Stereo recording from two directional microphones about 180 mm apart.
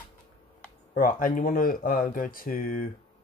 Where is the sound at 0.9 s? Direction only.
50° left (ahead or behind).